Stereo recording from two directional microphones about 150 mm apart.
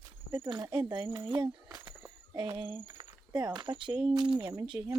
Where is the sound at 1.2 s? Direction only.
35° right (ahead or behind).